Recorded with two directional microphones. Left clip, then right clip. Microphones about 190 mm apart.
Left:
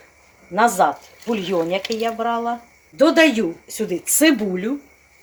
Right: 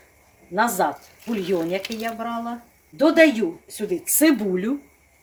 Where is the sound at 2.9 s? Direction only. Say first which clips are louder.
Left 2 dB; 30° left (ahead or behind).